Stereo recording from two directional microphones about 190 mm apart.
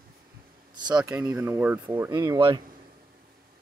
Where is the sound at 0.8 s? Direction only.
20° right (ahead or behind).